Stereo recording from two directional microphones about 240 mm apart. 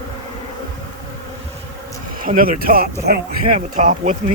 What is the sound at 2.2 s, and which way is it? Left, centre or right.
Speech, right.